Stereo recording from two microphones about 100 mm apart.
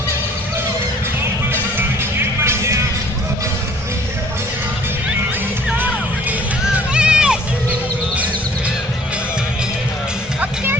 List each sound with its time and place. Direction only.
2.1 s music: 25° right (ahead or behind)
6.9 s run: 10° right (ahead or behind)